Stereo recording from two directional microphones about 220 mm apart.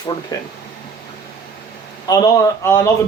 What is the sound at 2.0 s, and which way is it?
Speech, 15° left (ahead or behind).